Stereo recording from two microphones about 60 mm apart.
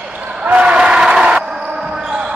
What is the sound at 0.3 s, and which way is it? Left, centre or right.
Basketball bounce, right.